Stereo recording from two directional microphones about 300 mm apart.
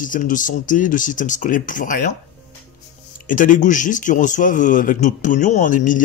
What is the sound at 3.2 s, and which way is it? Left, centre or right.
Speech, left.